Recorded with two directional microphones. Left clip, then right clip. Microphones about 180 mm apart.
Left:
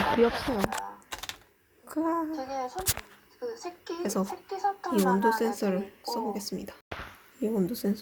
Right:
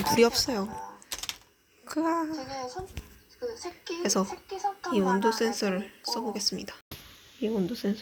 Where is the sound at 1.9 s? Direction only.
5° right (ahead or behind).